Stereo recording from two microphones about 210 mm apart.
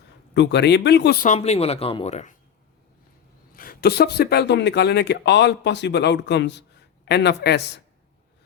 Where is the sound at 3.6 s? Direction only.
45° left (ahead or behind).